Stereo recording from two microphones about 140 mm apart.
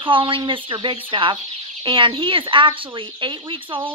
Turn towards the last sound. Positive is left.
turn(degrees=-35)  # may be behind; listen again after turning